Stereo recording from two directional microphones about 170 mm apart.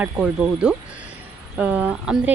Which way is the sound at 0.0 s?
5° right (ahead or behind).